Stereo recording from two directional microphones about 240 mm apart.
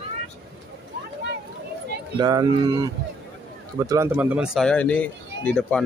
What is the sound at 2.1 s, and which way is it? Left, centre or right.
Speech, centre.